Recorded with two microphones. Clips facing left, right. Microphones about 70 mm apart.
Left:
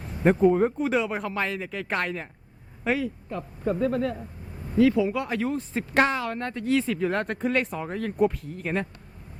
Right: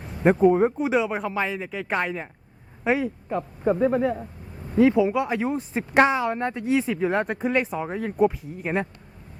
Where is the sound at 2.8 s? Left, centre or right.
Right.